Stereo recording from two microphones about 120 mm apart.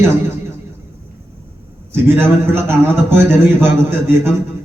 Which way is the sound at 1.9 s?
20° right (ahead or behind).